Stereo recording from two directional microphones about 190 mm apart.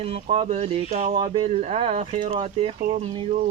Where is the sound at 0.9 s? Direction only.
35° right (ahead or behind).